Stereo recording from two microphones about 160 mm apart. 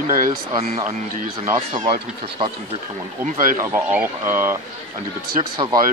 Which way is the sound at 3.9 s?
15° right (ahead or behind).